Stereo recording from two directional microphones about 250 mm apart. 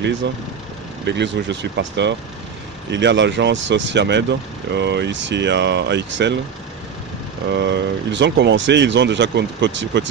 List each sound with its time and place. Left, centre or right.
1.0 s speech: right
7.5 s speech: right